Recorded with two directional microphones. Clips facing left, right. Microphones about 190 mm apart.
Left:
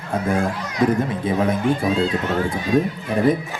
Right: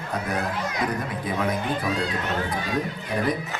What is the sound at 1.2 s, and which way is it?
Speech, 25° left (ahead or behind).